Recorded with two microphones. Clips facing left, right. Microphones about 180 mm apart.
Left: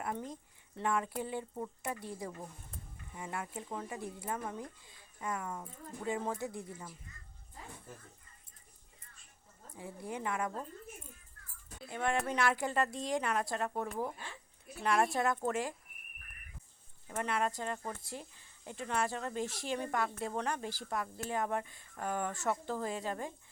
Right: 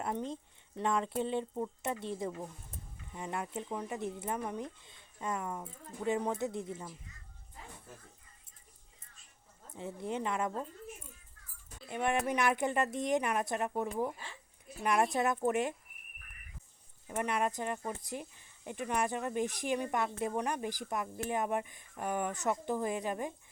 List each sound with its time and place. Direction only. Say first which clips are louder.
0.0 s speech: right 3 dB; 25° right (ahead or behind)
9.7 s speech: right 4 dB; 25° right (ahead or behind)
11.9 s speech: right 2 dB; 20° right (ahead or behind)
17.1 s speech: right 2 dB; 15° right (ahead or behind)